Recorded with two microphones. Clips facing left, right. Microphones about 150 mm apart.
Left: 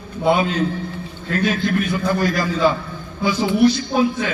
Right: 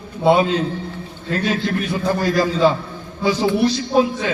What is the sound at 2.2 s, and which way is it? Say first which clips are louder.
A man's voice: right 4 dB; 30° right (ahead or behind).